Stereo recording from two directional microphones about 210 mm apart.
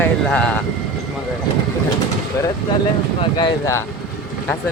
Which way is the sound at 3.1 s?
20° left (ahead or behind).